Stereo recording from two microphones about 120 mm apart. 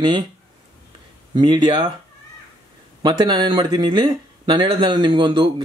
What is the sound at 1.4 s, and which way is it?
Speech, 35° right (ahead or behind).